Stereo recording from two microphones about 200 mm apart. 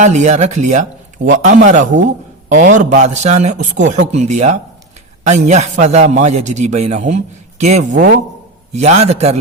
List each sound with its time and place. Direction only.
0.0 s a man's voice: 35° right (ahead or behind)